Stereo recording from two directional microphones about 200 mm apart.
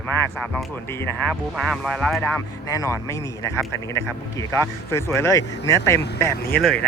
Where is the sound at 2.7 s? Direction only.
15° left (ahead or behind).